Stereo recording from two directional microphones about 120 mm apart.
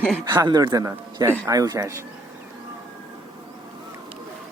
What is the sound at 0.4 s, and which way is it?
Speech, 35° right (ahead or behind).